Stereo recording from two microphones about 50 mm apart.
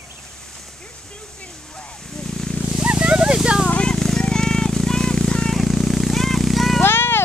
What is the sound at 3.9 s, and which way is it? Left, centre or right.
Vehicle, centre.